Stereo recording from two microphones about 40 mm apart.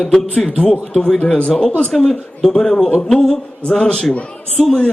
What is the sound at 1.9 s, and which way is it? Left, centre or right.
Speech, centre.